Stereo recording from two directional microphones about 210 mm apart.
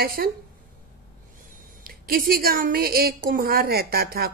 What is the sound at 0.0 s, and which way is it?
Speech, 45° right (ahead or behind).